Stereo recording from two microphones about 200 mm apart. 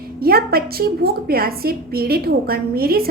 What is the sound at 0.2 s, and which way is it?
A woman's voice, 50° right (ahead or behind).